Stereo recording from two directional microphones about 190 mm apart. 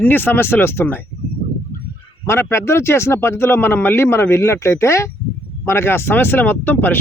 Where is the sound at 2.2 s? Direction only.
15° left (ahead or behind).